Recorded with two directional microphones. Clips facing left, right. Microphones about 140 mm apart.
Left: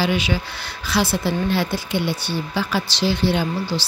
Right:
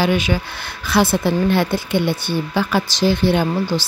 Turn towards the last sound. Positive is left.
turn(degrees=-50)  # may be behind; listen again after turning